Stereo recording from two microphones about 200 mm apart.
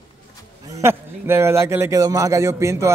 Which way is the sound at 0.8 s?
10° right (ahead or behind).